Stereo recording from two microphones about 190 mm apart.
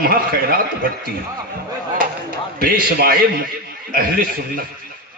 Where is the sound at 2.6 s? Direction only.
50° right (ahead or behind).